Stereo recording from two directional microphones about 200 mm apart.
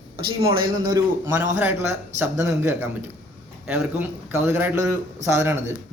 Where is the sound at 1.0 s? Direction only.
10° right (ahead or behind).